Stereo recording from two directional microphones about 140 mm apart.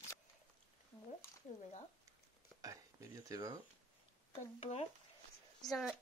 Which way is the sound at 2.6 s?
25° right (ahead or behind).